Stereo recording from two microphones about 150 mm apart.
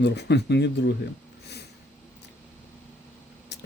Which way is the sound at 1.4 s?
90° left.